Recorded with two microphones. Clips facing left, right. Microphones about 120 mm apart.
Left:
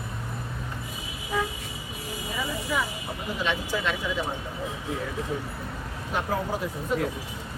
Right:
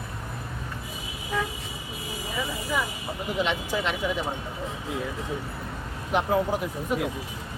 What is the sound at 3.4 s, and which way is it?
Speech, 20° right (ahead or behind).